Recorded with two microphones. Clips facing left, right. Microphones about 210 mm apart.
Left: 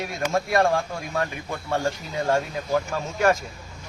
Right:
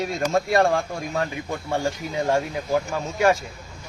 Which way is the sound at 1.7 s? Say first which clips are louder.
Right 1 dB; 15° right (ahead or behind).